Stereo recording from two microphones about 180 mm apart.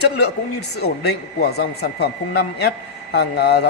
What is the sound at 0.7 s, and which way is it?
A woman's voice, 65° left (ahead or behind).